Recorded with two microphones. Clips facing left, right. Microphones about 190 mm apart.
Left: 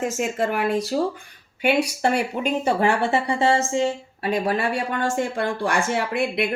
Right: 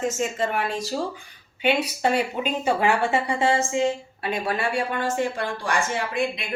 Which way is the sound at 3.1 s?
35° left (ahead or behind).